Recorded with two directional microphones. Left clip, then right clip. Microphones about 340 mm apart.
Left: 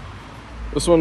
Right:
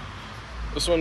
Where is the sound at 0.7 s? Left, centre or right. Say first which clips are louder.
Left 7 dB; centre.